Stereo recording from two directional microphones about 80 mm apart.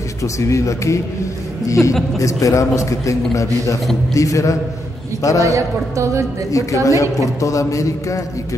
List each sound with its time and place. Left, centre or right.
0.2 s a man's voice: left
5.4 s a woman's voice: right
6.5 s a man's voice: left